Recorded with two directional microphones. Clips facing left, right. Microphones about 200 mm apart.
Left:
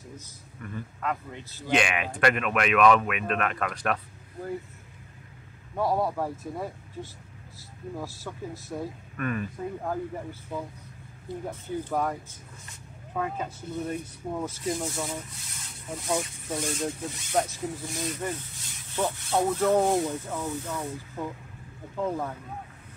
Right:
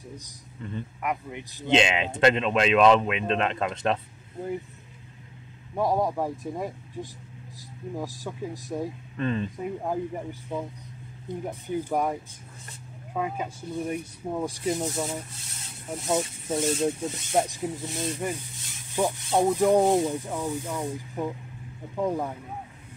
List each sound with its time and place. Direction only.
0.2 s speech: 20° right (ahead or behind)
5.8 s speech: 15° right (ahead or behind)
18.9 s speech: 15° right (ahead or behind)